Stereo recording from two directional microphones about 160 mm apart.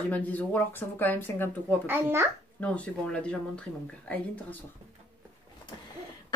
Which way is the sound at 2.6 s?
10° left (ahead or behind).